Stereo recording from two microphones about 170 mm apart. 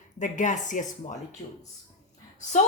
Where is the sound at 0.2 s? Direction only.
45° left (ahead or behind).